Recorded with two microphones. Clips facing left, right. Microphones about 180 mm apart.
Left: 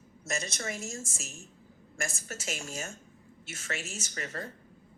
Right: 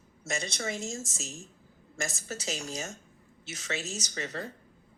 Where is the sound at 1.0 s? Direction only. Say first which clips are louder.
Right 3 dB; 35° right (ahead or behind).